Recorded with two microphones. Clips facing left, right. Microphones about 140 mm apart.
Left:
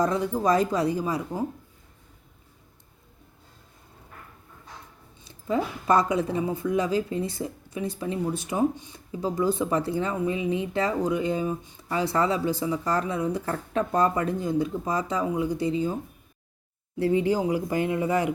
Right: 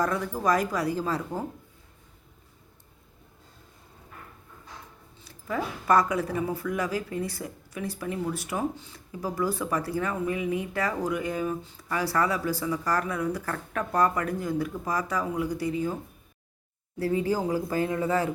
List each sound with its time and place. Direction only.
0.0 s speech: 20° left (ahead or behind)
5.2 s speech: 25° left (ahead or behind)
17.0 s speech: 20° left (ahead or behind)